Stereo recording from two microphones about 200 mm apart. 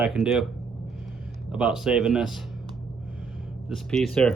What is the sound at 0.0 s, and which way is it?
Speech, centre (ahead or behind).